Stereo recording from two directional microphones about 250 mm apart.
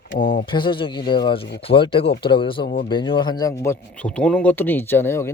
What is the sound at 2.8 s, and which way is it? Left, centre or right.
Speech, centre.